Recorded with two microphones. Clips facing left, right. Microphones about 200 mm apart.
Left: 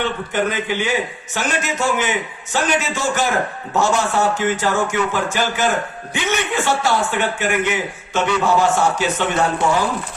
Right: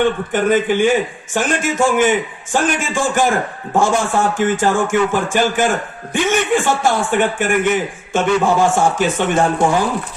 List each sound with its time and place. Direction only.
0.0 s a man's voice: 50° right (ahead or behind)